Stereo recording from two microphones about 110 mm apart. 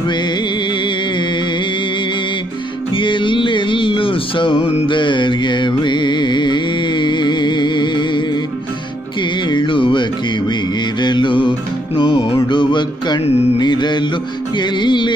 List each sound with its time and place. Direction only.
3.0 s music: 50° left (ahead or behind)
4.9 s music: 45° left (ahead or behind)
9.5 s music: 45° left (ahead or behind)
11.0 s mantra: 45° left (ahead or behind)
12.0 s music: 55° left (ahead or behind)
13.6 s mantra: 40° left (ahead or behind)
14.6 s music: 45° left (ahead or behind)